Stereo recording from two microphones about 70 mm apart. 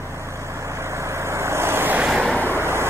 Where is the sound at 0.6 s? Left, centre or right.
Right.